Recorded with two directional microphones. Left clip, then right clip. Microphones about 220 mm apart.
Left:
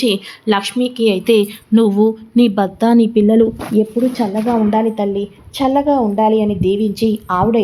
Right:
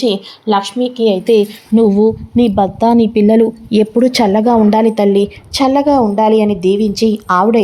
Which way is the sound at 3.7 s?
35° right (ahead or behind).